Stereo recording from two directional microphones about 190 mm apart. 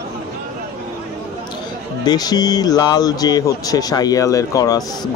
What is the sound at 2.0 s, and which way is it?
Speech, 20° left (ahead or behind).